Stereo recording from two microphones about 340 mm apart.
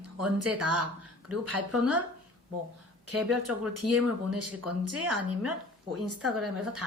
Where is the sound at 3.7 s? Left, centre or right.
Right.